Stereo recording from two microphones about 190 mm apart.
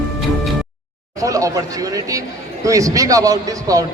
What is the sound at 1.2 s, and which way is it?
A man's voice, 15° right (ahead or behind).